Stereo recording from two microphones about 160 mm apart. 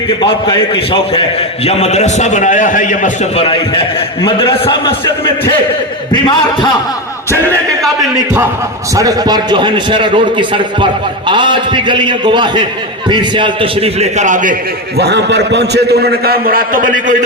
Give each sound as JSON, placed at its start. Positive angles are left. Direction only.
{"t": 0.2, "sound": "a man's voice", "side_deg": 30}
{"t": 1.6, "sound": "a man's voice", "side_deg": 45}
{"t": 4.2, "sound": "a man's voice", "side_deg": 30}
{"t": 9.0, "sound": "a man's voice", "side_deg": -25}
{"t": 14.9, "sound": "a man's voice", "side_deg": -90}